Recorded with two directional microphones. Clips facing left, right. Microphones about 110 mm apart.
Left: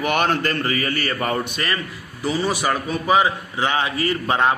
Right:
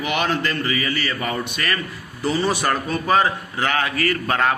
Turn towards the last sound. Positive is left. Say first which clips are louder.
# left 1 dB
turn(degrees=20)  # may be behind; listen again after turning